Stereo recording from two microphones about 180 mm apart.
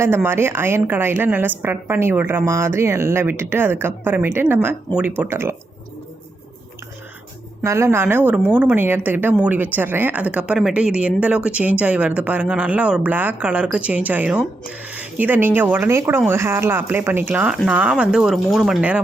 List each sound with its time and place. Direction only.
0.0 s a woman's voice: 15° right (ahead or behind)
7.6 s a woman's voice: 15° right (ahead or behind)